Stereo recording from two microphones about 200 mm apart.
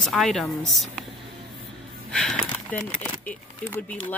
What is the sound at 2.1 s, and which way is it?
Speech, 5° left (ahead or behind).